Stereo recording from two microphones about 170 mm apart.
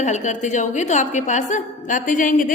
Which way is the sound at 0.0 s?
45° left (ahead or behind).